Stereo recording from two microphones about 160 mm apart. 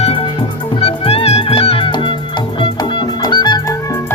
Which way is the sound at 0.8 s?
40° left (ahead or behind).